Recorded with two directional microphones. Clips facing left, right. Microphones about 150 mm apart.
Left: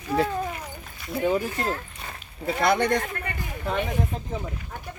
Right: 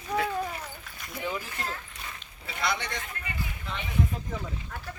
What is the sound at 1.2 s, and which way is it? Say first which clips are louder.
Speech: left 10 dB; 45° left (ahead or behind).